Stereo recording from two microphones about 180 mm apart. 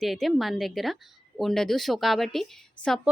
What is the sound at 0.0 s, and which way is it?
Speech, centre (ahead or behind).